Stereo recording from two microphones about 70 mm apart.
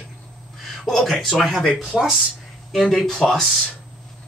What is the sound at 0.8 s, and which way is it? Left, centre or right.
A man's voice, centre.